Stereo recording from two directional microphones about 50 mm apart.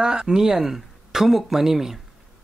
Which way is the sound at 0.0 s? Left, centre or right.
Centre.